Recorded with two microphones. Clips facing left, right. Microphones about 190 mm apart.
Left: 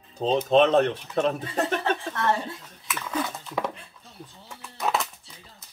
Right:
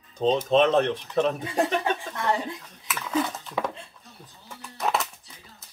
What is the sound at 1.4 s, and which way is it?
A woman's voice, 10° right (ahead or behind).